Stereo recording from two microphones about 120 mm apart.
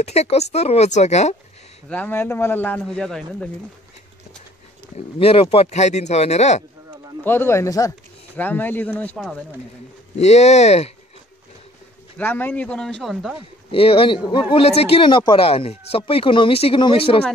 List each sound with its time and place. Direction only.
0.0 s speech: 65° left (ahead or behind)
1.9 s speech: 15° left (ahead or behind)
2.9 s speech: 5° left (ahead or behind)
4.9 s speech: 55° left (ahead or behind)
7.2 s speech: 20° left (ahead or behind)
8.4 s speech: 15° left (ahead or behind)
9.1 s speech: 5° left (ahead or behind)
10.1 s speech: 65° left (ahead or behind)
12.2 s speech: 15° left (ahead or behind); by 13.4 s centre (ahead or behind)
13.7 s speech: 50° left (ahead or behind)
14.5 s speech: 55° left (ahead or behind)
16.1 s speech: 50° left (ahead or behind)